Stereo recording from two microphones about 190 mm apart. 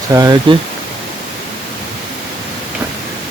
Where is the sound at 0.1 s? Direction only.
20° right (ahead or behind).